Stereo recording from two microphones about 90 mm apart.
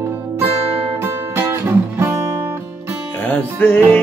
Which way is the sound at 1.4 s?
30° right (ahead or behind).